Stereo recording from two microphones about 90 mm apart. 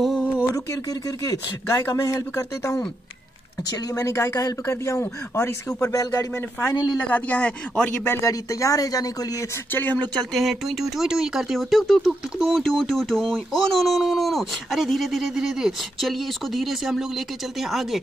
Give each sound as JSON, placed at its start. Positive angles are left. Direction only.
{"t": 0.0, "sound": "a sound", "side_deg": 5}
{"t": 0.7, "sound": "speech", "side_deg": 40}
{"t": 3.7, "sound": "speech", "side_deg": 35}
{"t": 6.7, "sound": "a woman's voice", "side_deg": 50}
{"t": 7.1, "sound": "speech", "side_deg": 15}
{"t": 8.2, "sound": "speech", "side_deg": 35}
{"t": 9.7, "sound": "speech", "side_deg": 20}
{"t": 10.3, "sound": "speech", "side_deg": 0}